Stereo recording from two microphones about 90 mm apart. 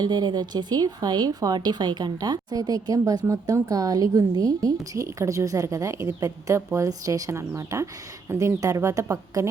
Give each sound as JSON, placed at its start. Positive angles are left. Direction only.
{"t": 0.0, "sound": "a woman's voice", "side_deg": -50}